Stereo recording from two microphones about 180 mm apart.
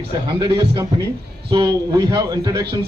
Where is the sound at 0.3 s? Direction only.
20° right (ahead or behind).